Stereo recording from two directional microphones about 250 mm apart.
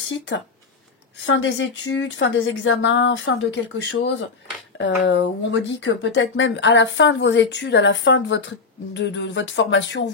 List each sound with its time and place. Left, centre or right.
1.2 s speech: left